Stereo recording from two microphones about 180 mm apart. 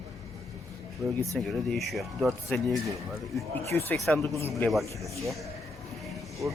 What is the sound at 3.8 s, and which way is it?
Speech, 10° left (ahead or behind).